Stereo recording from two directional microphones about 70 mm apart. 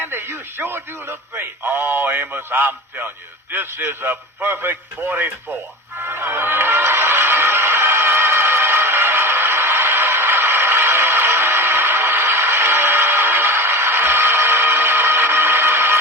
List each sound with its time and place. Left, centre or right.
0.0 s speech: right
6.0 s music: right